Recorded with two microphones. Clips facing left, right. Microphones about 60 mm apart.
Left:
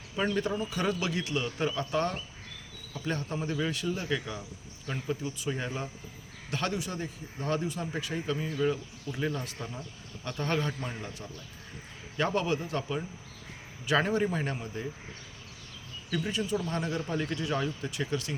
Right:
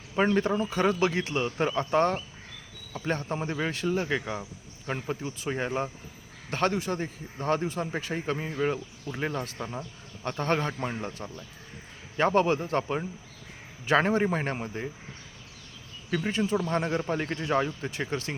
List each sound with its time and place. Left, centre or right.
0.2 s speech: right
16.0 s speech: right